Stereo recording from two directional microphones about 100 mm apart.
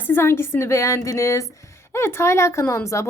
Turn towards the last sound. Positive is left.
turn(degrees=30)  # may be behind; listen again after turning